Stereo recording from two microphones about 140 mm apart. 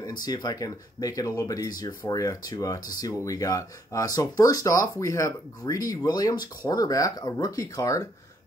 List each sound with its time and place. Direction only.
0.0 s speech: 30° left (ahead or behind)